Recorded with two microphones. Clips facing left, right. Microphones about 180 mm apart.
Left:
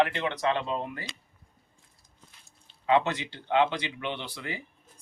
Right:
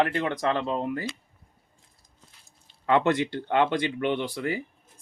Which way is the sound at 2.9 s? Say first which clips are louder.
Right 3 dB; 55° right (ahead or behind).